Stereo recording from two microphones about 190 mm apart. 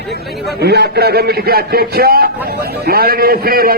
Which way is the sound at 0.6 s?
60° right (ahead or behind).